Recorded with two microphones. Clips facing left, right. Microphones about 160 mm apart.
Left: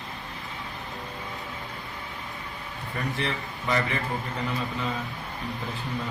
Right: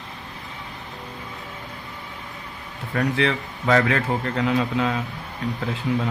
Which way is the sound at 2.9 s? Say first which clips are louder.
Right 9 dB; 85° right.